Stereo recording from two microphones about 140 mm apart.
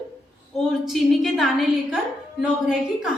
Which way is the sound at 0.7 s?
Centre (ahead or behind).